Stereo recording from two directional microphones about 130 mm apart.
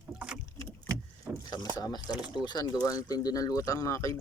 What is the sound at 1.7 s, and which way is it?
Speech, 30° left (ahead or behind).